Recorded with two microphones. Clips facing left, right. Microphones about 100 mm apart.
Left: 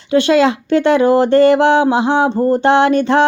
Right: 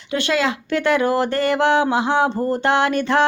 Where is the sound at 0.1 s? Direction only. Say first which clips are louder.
Left 9 dB; 30° left (ahead or behind).